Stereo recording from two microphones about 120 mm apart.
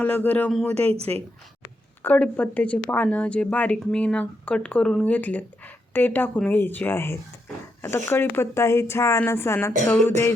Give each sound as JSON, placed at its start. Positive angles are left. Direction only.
{"t": 0.0, "sound": "speech", "side_deg": 15}
{"t": 0.9, "sound": "a woman's voice", "side_deg": -55}
{"t": 2.0, "sound": "a woman's voice", "side_deg": 10}